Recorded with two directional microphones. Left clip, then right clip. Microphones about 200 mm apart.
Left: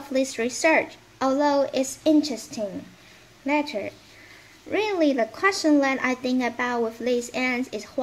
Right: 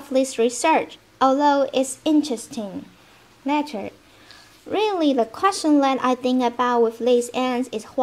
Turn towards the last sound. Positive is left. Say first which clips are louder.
# right 3 dB
turn(degrees=-30)  # may be behind; listen again after turning